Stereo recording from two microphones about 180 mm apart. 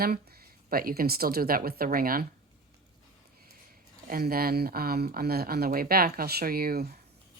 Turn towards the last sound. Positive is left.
turn(degrees=-60)  # may be behind; listen again after turning